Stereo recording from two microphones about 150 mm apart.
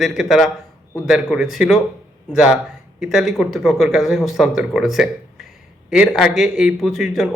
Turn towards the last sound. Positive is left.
turn(degrees=0)  # may be behind; listen again after turning